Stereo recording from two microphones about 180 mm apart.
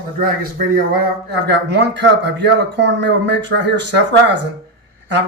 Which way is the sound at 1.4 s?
70° right (ahead or behind).